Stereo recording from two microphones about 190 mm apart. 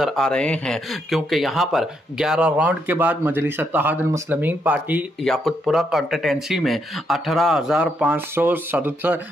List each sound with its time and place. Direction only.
0.0 s speech: centre (ahead or behind)
5.2 s speech: centre (ahead or behind)